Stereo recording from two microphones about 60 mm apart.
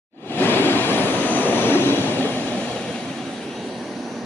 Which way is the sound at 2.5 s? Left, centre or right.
Centre.